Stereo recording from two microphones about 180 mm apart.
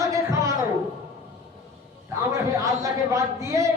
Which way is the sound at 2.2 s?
15° right (ahead or behind).